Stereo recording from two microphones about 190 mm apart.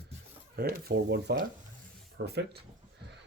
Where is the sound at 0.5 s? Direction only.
55° right (ahead or behind).